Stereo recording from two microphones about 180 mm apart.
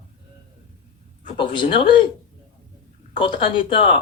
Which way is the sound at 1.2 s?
30° left (ahead or behind).